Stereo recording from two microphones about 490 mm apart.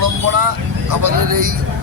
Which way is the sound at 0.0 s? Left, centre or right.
Right.